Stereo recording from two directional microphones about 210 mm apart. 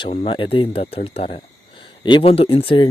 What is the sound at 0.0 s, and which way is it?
Speech, 25° left (ahead or behind).